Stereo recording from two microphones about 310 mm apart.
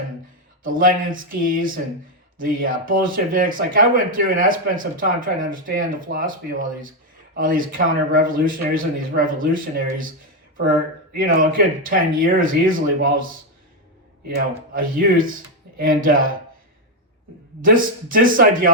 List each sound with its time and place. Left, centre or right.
0.6 s speech: right
14.7 s speech: right
17.6 s speech: right